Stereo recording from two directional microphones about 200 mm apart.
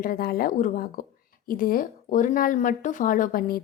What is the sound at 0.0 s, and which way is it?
Speech, 45° left (ahead or behind).